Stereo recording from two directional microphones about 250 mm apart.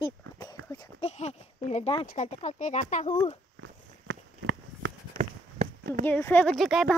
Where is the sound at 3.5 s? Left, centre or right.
Right.